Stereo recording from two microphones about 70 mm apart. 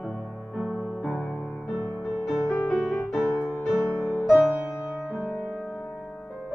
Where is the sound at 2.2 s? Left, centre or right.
Centre.